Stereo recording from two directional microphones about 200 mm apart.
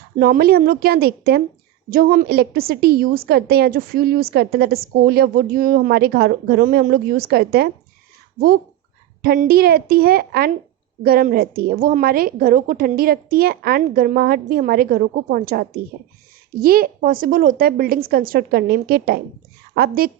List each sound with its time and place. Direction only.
0.2 s a woman's voice: 50° right (ahead or behind)